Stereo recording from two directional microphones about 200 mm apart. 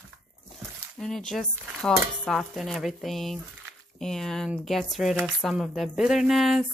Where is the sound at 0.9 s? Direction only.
Centre (ahead or behind).